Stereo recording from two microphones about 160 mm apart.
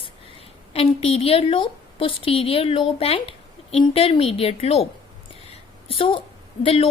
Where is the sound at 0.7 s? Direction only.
40° left (ahead or behind).